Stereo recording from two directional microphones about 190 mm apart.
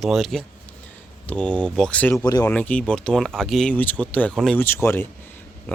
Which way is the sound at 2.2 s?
20° left (ahead or behind).